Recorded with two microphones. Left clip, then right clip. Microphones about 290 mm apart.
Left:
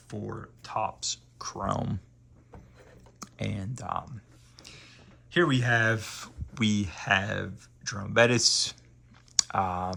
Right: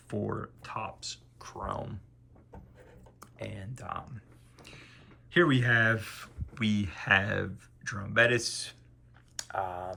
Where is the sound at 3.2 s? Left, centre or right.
Centre.